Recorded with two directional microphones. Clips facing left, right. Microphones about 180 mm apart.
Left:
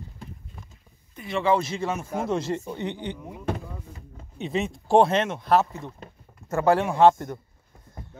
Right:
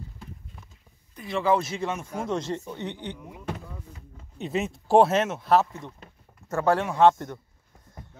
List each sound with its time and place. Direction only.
1.1 s speech: centre (ahead or behind)
4.4 s speech: centre (ahead or behind)
5.8 s speech: 35° left (ahead or behind)
6.5 s speech: 10° left (ahead or behind)